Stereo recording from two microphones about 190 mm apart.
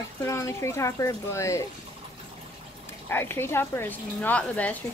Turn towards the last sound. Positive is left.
turn(degrees=10)  # may be behind; listen again after turning